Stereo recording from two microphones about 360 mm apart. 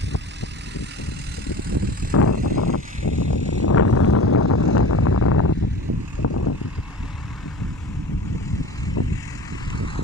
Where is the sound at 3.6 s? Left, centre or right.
Left.